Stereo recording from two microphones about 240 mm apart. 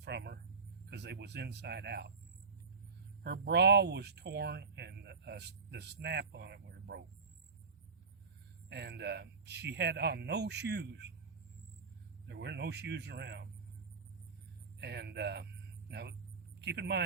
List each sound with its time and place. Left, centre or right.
0.0 s a sound: right
0.9 s speech: right
3.2 s speech: right
8.7 s speech: right
12.3 s speech: right
14.8 s speech: right